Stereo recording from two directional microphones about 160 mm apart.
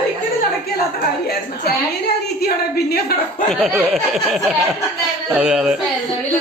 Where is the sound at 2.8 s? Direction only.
75° left (ahead or behind).